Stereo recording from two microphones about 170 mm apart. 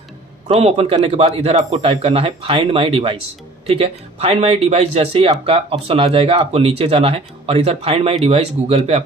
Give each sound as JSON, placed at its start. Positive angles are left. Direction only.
{"t": 0.5, "sound": "speech", "side_deg": -40}